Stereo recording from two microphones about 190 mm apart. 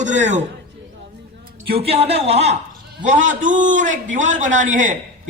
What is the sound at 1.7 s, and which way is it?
A man's voice, 30° right (ahead or behind).